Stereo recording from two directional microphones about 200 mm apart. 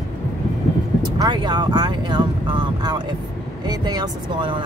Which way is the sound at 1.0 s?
20° right (ahead or behind).